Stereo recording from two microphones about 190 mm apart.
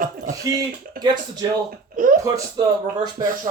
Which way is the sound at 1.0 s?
50° right (ahead or behind).